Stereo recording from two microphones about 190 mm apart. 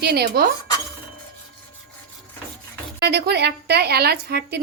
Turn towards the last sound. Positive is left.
turn(degrees=-60)  # may be behind; listen again after turning